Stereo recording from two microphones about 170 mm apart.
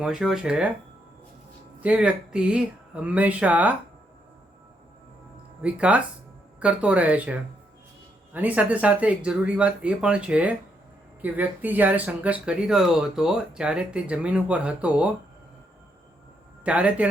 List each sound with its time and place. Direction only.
0.0 s speech: 5° right (ahead or behind)
1.8 s speech: 5° right (ahead or behind)
5.6 s speech: 5° right (ahead or behind)
16.6 s speech: 10° right (ahead or behind)